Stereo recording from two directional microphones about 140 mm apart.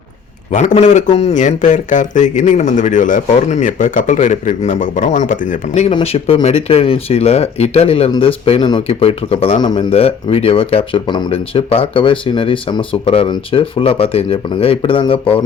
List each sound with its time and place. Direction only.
0.5 s speech: 60° left (ahead or behind)
6.0 s speech: 45° left (ahead or behind)
9.6 s speech: 30° left (ahead or behind)
9.9 s speech: 45° left (ahead or behind)